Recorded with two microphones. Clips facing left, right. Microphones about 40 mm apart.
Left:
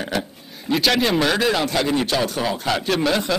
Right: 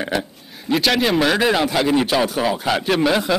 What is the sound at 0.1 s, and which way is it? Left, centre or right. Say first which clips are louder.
A man's voice: right 2 dB; centre.